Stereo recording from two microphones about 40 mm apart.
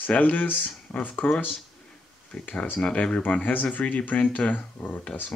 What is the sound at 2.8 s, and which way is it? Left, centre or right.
Speech, left.